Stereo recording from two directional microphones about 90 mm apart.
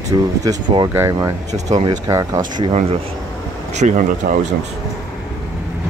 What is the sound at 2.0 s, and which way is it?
Speech, 35° right (ahead or behind).